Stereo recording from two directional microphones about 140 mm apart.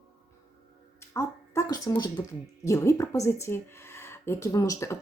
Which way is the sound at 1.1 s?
20° left (ahead or behind).